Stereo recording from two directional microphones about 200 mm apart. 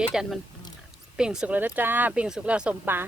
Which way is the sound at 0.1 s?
Centre (ahead or behind).